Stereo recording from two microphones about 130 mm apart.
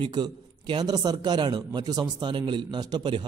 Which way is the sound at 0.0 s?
35° right (ahead or behind).